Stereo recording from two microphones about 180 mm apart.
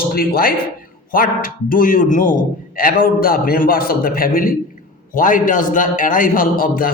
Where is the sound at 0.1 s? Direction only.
55° left (ahead or behind).